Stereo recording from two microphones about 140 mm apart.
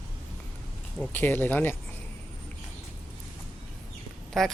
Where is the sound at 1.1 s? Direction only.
15° left (ahead or behind).